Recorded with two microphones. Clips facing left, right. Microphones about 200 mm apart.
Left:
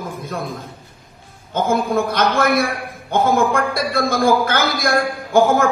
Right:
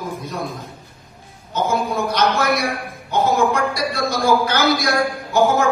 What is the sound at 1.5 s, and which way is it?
A man's voice, 50° left (ahead or behind).